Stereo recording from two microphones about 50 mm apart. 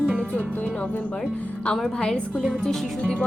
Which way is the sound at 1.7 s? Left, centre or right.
Centre.